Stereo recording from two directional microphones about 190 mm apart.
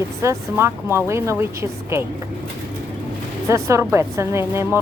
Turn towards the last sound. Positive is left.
turn(degrees=-15)  # may be behind; listen again after turning